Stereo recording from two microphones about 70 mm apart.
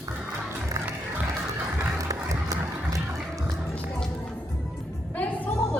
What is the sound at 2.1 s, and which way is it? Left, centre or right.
Run, right.